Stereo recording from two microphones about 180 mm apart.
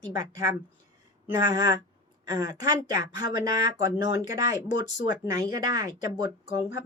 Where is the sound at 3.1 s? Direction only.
20° right (ahead or behind).